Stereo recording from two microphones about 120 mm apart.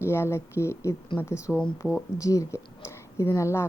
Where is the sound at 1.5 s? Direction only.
5° left (ahead or behind).